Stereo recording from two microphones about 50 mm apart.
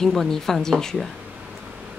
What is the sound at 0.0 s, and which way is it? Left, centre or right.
A woman's voice, centre.